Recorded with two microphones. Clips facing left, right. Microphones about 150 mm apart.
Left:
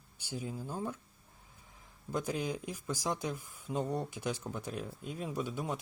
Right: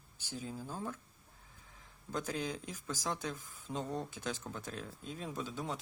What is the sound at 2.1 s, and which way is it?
Speech, 15° left (ahead or behind).